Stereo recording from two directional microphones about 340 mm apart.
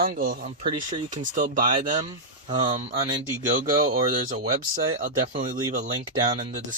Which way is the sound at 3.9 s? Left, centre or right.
Right.